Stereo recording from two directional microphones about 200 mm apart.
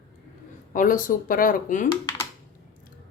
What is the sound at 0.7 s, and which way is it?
Speech, 40° left (ahead or behind).